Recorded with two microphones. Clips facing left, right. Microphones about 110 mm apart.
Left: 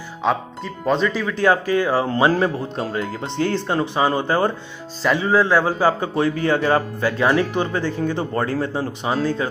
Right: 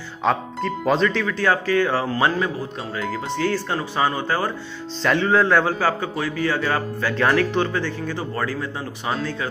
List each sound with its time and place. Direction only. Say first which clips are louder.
0.2 s speech: even; centre (ahead or behind)
1.2 s speech: left 3 dB; 15° left (ahead or behind)
2.3 s speech: left 4 dB; 35° left (ahead or behind)
3.4 s a man's voice: left 4 dB; 25° left (ahead or behind)
5.0 s a man's voice: left 1 dB; 5° left (ahead or behind); by 9.5 s 25° left (ahead or behind)